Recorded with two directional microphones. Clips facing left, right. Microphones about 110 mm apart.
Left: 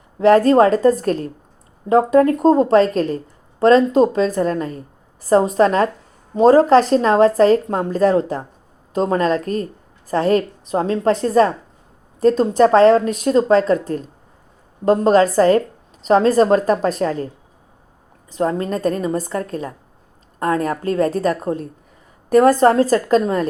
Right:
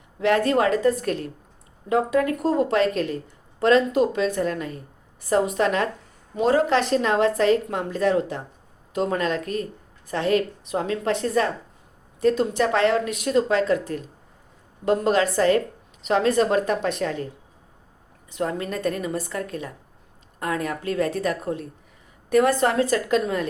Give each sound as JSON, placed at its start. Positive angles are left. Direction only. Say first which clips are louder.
{"t": 0.2, "sound": "speech", "louder": "left 8 dB", "side_deg": 35}
{"t": 18.3, "sound": "speech", "louder": "left 7 dB", "side_deg": 35}